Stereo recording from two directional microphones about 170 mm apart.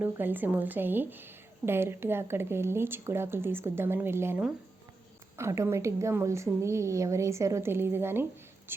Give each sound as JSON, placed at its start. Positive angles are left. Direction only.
{"t": 0.0, "sound": "a woman's voice", "side_deg": -10}